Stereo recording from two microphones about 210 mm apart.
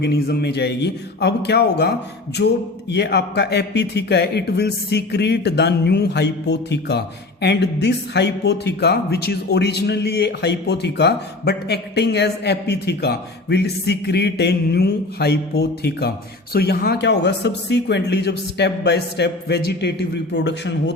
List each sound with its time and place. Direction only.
0.0 s speech: 50° left (ahead or behind)
2.4 s a sound: 55° left (ahead or behind)
2.9 s speech: 50° left (ahead or behind)